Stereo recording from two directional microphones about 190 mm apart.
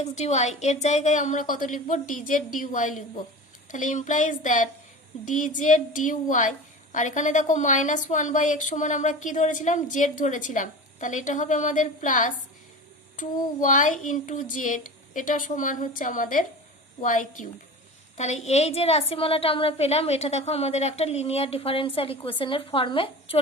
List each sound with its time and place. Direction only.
0.0 s a woman's voice: 35° left (ahead or behind)